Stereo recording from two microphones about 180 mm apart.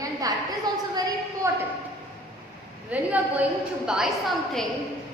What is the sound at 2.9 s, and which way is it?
A woman's voice, 10° right (ahead or behind).